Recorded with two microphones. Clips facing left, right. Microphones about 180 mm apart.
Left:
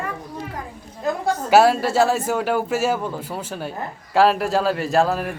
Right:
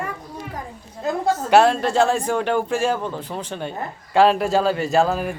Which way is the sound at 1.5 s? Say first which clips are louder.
Left 1 dB; 5° left (ahead or behind).